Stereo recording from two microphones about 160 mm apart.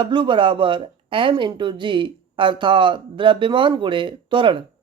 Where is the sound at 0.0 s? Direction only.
30° right (ahead or behind).